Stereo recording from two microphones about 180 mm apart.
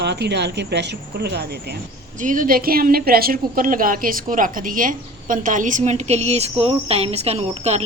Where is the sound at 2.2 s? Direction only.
45° right (ahead or behind).